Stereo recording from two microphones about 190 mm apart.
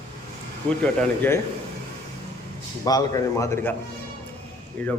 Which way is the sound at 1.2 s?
10° left (ahead or behind).